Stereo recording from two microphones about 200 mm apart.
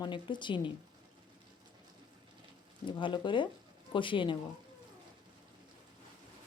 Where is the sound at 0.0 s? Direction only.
25° left (ahead or behind).